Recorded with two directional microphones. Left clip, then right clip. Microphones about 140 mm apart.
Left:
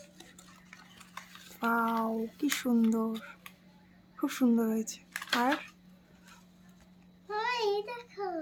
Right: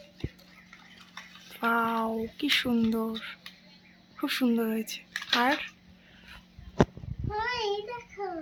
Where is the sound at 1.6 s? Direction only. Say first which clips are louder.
Right 3 dB; 10° left (ahead or behind).